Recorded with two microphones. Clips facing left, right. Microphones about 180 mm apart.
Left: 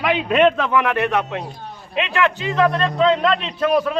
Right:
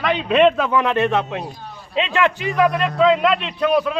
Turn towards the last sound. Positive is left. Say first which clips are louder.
# even
turn(degrees=0)  # may be behind; listen again after turning